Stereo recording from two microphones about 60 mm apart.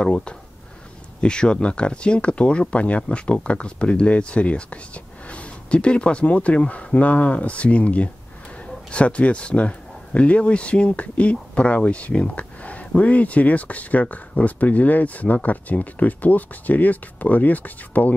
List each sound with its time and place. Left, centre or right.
0.0 s speech: centre